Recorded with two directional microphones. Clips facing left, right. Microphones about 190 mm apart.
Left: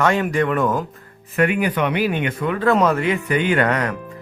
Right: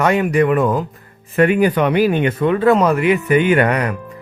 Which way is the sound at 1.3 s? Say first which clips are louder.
Right 5 dB; 35° right (ahead or behind).